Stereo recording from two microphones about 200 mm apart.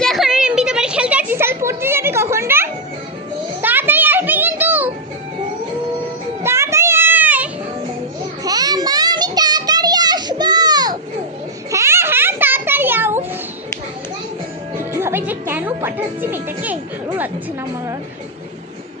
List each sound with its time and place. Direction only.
0.0 s children playing: centre (ahead or behind)
6.4 s children playing: 15° right (ahead or behind)
8.4 s a sound: 20° right (ahead or behind)
14.8 s music: 10° right (ahead or behind)